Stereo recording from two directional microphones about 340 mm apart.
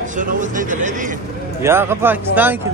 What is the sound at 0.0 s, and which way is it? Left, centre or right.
Speech, right.